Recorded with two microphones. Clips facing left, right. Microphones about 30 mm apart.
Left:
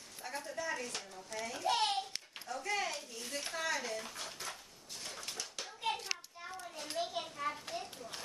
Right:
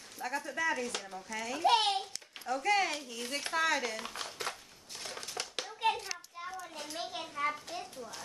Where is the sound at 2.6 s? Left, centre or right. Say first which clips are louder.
Right 7 dB; right.